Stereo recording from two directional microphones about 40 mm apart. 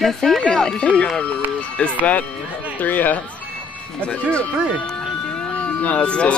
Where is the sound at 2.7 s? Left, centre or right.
Left.